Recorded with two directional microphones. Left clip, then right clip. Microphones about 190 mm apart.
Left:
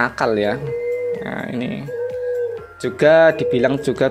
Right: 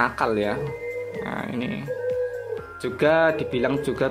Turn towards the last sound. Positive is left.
turn(degrees=30)  # may be behind; listen again after turning